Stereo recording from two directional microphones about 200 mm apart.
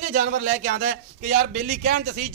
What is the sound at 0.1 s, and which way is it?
A man's voice, 45° right (ahead or behind).